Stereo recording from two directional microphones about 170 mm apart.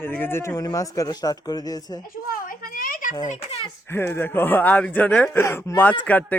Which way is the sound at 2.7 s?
55° left (ahead or behind).